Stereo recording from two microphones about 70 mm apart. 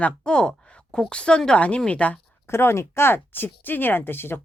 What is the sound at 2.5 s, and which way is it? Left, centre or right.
Speech, left.